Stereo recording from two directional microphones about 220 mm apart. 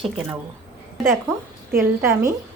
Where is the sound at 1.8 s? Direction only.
15° right (ahead or behind).